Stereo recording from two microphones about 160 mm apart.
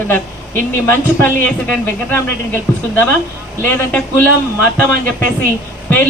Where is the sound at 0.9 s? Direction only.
15° left (ahead or behind).